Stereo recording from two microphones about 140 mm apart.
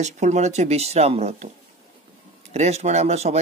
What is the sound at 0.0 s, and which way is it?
Speech, 55° right (ahead or behind).